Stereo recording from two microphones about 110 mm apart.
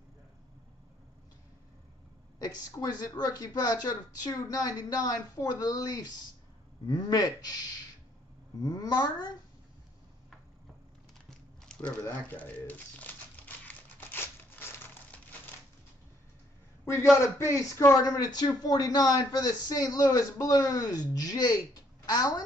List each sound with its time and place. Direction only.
2.3 s speech: 35° left (ahead or behind)
11.2 s a sound: 5° left (ahead or behind)
12.0 s typewriter: 15° left (ahead or behind)
16.8 s a man's voice: 25° left (ahead or behind)